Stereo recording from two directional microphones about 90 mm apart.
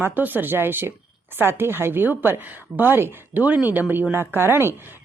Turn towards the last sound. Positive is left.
turn(degrees=-25)  # may be behind; listen again after turning